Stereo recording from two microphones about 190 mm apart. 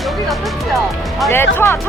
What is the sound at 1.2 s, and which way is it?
Speech, 15° left (ahead or behind).